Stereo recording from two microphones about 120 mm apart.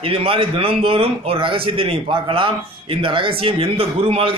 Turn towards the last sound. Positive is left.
turn(degrees=-50)  # may be behind; listen again after turning